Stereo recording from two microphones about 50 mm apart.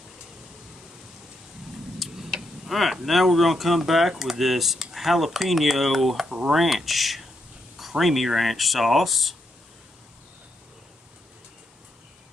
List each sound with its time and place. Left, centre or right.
2.0 s a sound: centre
2.6 s speech: centre
6.2 s speech: centre
6.5 s speech: centre